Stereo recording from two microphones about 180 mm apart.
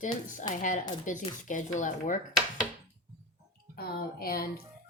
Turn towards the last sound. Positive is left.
turn(degrees=55)  # may be behind; listen again after turning